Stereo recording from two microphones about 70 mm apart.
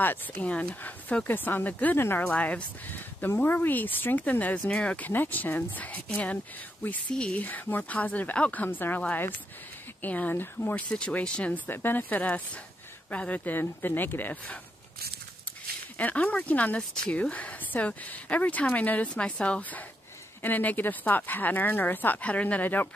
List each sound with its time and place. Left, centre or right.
0.0 s speech: left
10.0 s speech: left
10.9 s speech: centre
16.0 s speech: left